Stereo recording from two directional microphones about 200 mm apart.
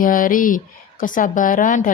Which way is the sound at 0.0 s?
45° left (ahead or behind).